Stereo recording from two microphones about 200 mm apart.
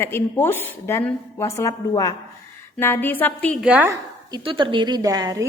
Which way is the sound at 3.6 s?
10° right (ahead or behind).